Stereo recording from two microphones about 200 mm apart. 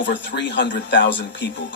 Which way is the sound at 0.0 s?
60° left (ahead or behind).